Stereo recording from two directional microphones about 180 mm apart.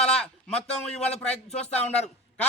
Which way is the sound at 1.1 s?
35° left (ahead or behind).